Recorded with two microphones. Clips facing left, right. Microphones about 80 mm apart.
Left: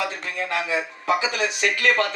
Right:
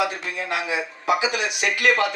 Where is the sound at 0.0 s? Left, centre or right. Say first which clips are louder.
Right 2 dB; centre.